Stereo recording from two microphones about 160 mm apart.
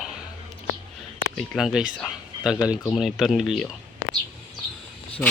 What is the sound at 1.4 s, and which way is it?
Speech, 5° right (ahead or behind).